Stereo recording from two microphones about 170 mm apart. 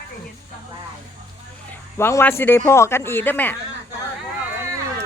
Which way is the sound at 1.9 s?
15° left (ahead or behind).